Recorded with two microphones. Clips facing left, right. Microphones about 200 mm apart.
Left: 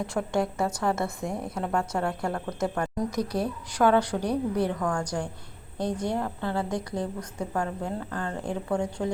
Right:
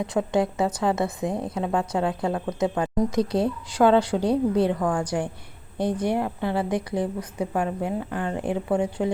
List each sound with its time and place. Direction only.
0.0 s a woman's voice: 20° right (ahead or behind)